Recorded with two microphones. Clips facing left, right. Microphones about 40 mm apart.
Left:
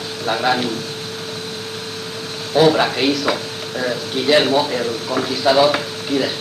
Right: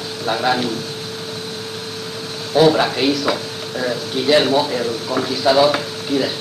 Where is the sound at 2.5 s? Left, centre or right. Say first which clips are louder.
Even; left.